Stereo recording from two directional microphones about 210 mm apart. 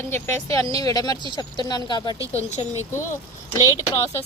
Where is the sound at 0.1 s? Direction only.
15° left (ahead or behind).